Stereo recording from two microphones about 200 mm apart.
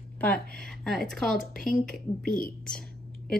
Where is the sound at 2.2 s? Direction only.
45° left (ahead or behind).